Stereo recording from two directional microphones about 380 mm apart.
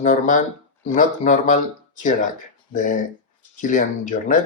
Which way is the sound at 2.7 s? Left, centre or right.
Left.